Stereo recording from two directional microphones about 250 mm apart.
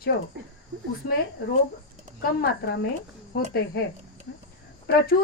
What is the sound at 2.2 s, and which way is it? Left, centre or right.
A woman's voice, left.